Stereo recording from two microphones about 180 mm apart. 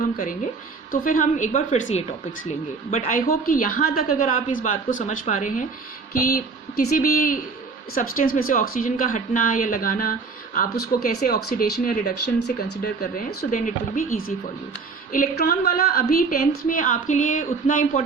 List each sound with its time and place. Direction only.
0.0 s speech: 50° left (ahead or behind)